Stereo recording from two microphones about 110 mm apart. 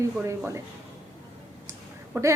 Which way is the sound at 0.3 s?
25° right (ahead or behind).